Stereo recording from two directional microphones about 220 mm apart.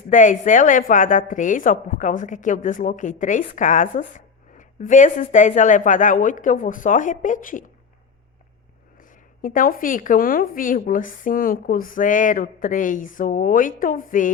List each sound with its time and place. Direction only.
0.1 s speech: 35° left (ahead or behind)
9.0 s speech: 40° left (ahead or behind)